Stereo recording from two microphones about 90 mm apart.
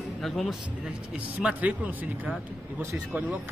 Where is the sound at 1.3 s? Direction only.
15° right (ahead or behind).